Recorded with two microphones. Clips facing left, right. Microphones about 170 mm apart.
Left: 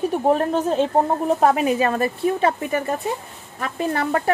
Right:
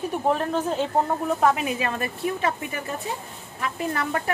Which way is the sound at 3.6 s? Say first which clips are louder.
Left 4 dB; 35° left (ahead or behind).